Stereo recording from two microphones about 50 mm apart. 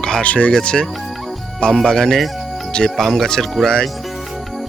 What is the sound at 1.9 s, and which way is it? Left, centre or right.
Speech, centre.